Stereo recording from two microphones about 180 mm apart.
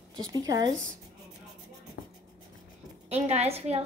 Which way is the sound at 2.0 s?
55° left (ahead or behind).